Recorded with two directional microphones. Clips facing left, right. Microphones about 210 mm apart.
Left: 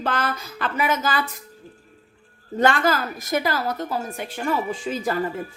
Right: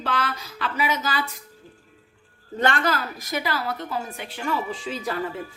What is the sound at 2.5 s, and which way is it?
A woman's voice, 45° left (ahead or behind).